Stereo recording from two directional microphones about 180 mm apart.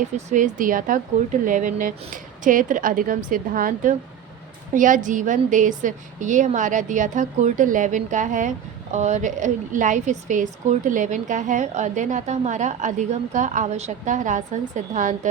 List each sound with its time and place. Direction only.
0.3 s a woman's voice: 45° right (ahead or behind)